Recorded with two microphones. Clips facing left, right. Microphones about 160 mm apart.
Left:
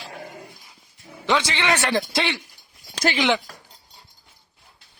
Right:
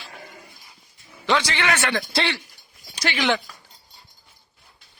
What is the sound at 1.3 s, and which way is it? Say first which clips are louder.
A man's voice: left 1 dB; 20° left (ahead or behind).